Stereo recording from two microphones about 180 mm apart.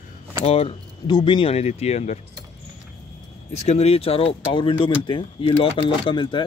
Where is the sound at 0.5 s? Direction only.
30° left (ahead or behind).